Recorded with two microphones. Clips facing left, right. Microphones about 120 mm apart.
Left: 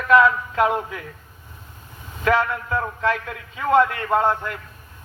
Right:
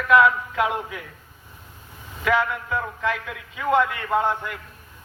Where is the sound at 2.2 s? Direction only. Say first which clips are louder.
Left 2 dB; 35° left (ahead or behind).